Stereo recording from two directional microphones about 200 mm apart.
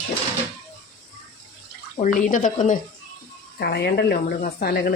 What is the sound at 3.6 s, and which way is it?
Speech, 55° left (ahead or behind).